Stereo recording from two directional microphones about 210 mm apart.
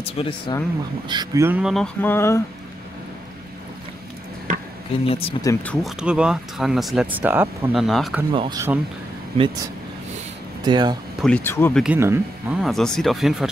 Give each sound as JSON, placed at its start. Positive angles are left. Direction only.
{"t": 0.0, "sound": "speech", "side_deg": 25}
{"t": 1.0, "sound": "speech", "side_deg": -20}
{"t": 5.0, "sound": "speech", "side_deg": 25}
{"t": 5.4, "sound": "speech", "side_deg": 10}
{"t": 5.9, "sound": "speech", "side_deg": -5}
{"t": 8.3, "sound": "speech", "side_deg": -20}
{"t": 10.6, "sound": "speech", "side_deg": -20}
{"t": 11.2, "sound": "speech", "side_deg": 10}
{"t": 11.8, "sound": "speech", "side_deg": -10}